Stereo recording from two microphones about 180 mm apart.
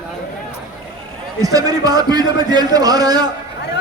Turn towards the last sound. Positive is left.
turn(degrees=-20)  # may be behind; listen again after turning